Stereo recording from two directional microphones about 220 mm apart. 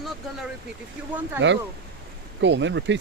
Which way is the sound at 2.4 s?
55° right (ahead or behind).